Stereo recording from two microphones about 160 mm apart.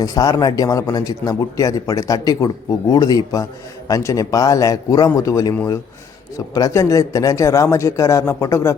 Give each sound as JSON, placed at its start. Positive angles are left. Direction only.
{"t": 0.0, "sound": "speech", "side_deg": 20}